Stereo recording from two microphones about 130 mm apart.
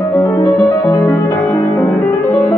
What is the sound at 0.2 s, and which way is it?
Music, 25° left (ahead or behind).